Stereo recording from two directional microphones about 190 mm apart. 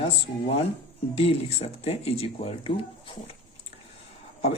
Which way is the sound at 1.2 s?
30° left (ahead or behind).